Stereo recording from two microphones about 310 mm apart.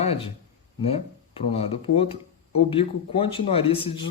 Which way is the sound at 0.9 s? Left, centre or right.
Centre.